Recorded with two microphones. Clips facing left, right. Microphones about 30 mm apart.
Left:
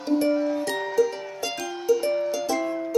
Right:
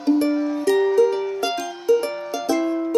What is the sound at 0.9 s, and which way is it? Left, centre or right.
Music, centre.